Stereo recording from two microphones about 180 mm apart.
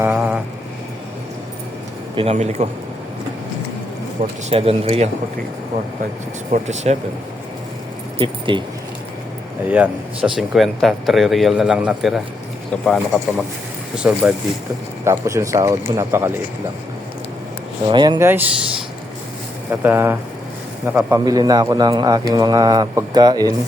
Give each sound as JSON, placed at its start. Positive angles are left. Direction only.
{"t": 0.1, "sound": "vehicle", "side_deg": -5}
{"t": 2.1, "sound": "speech", "side_deg": -35}
{"t": 4.4, "sound": "speech", "side_deg": -35}
{"t": 6.5, "sound": "speech", "side_deg": -40}
{"t": 8.2, "sound": "speech", "side_deg": -25}
{"t": 9.6, "sound": "speech", "side_deg": -5}
{"t": 15.0, "sound": "speech", "side_deg": -15}
{"t": 17.8, "sound": "a man's voice", "side_deg": -25}
{"t": 18.2, "sound": "speech", "side_deg": -10}
{"t": 19.8, "sound": "a man's voice", "side_deg": -10}